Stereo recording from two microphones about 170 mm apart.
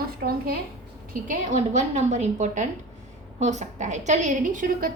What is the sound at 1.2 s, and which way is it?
A woman's voice, 45° right (ahead or behind).